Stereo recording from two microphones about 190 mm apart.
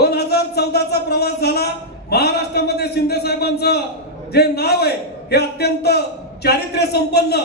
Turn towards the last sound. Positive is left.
turn(degrees=60)  # may be behind; listen again after turning